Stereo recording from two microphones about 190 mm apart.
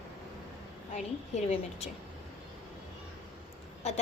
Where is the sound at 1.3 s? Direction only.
35° left (ahead or behind).